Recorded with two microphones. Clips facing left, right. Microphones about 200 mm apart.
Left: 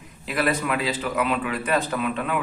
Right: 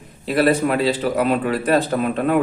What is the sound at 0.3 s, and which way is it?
A man's voice, 35° right (ahead or behind).